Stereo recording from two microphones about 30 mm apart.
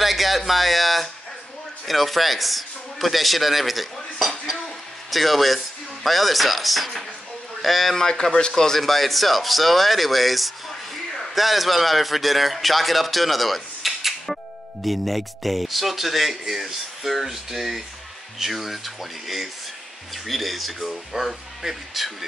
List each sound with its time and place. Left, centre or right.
0.0 s speech: centre
7.9 s speech: left
8.7 s speech: centre